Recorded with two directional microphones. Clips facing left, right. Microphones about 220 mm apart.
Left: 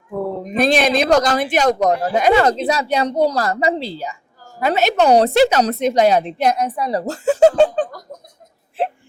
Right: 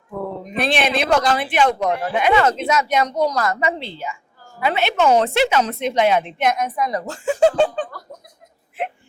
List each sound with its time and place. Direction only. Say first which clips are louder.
0.5 s a man's voice: left 5 dB; 40° left (ahead or behind)